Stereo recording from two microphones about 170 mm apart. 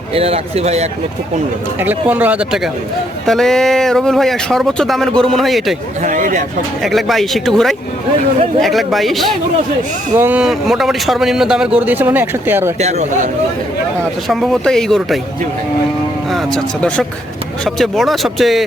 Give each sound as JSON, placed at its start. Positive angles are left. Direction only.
{"t": 0.1, "sound": "speech", "side_deg": -35}
{"t": 1.8, "sound": "a man's voice", "side_deg": -10}
{"t": 6.0, "sound": "speech", "side_deg": -45}
{"t": 6.8, "sound": "a man's voice", "side_deg": 0}
{"t": 12.8, "sound": "speech", "side_deg": -40}
{"t": 14.3, "sound": "a man's voice", "side_deg": 0}
{"t": 16.3, "sound": "a man's voice", "side_deg": 0}